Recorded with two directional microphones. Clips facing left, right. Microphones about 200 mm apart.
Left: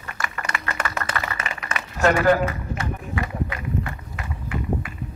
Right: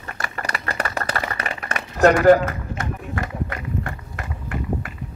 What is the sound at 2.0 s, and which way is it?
Run, 45° right (ahead or behind).